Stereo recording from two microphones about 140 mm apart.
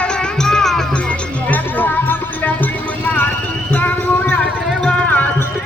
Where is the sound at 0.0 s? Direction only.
5° left (ahead or behind).